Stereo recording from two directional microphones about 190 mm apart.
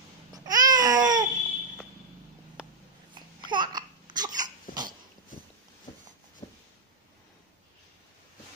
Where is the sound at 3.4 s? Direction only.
25° right (ahead or behind).